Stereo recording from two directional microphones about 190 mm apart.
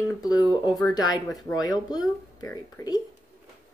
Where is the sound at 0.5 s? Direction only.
20° left (ahead or behind).